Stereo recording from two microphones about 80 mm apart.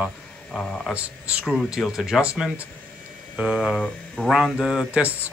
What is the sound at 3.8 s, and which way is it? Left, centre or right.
Speech, centre.